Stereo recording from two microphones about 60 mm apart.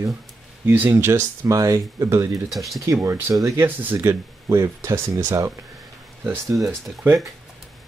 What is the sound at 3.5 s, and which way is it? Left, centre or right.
Speech, right.